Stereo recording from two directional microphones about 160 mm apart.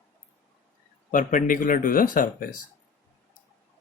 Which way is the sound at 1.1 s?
55° left (ahead or behind).